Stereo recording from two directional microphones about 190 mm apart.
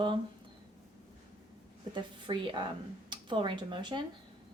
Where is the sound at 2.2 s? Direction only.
25° right (ahead or behind).